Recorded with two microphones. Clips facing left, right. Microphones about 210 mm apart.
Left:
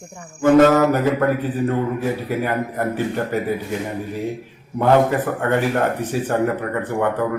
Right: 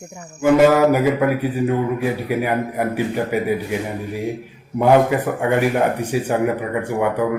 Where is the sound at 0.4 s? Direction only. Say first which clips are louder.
Even; 10° right (ahead or behind).